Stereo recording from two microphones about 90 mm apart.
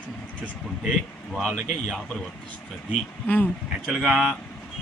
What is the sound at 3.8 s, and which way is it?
Speech, centre (ahead or behind).